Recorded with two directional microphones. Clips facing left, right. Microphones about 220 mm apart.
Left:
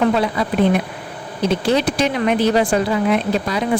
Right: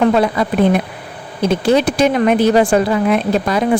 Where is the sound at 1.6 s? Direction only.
50° right (ahead or behind).